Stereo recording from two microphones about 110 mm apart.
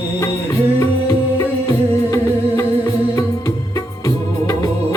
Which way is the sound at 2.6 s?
25° left (ahead or behind).